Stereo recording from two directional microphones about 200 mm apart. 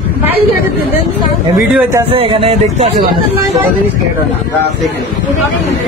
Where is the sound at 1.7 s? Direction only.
15° right (ahead or behind).